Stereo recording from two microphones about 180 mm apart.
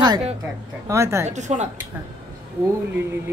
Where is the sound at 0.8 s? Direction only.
15° right (ahead or behind).